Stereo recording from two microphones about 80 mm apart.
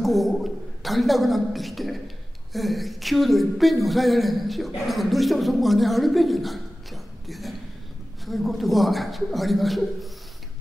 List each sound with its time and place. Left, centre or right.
0.0 s a woman's voice: centre